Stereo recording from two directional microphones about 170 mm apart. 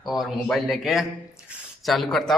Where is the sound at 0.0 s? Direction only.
Centre (ahead or behind).